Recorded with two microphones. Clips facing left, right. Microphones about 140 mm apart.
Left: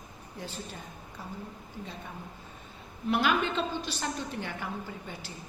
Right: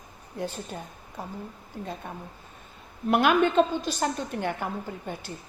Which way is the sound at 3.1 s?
55° right (ahead or behind).